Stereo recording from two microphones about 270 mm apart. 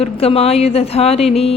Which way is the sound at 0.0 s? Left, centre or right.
Left.